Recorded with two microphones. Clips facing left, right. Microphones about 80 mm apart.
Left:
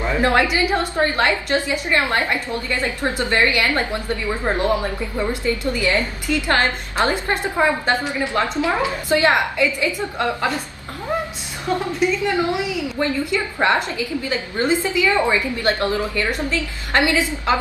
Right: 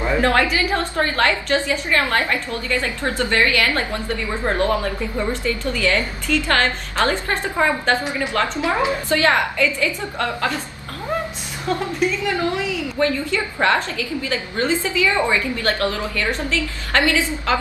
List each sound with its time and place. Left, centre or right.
0.2 s a woman's voice: centre
8.5 s a woman's voice: right
9.1 s a woman's voice: centre
12.4 s a woman's voice: centre